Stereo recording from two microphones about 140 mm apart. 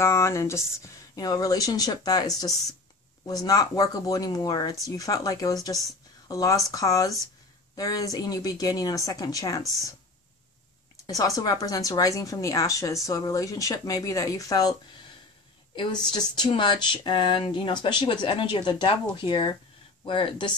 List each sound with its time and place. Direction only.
0.0 s speech: 20° left (ahead or behind)
11.1 s speech: 25° left (ahead or behind)